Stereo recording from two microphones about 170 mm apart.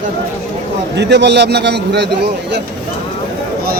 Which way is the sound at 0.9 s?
90° right.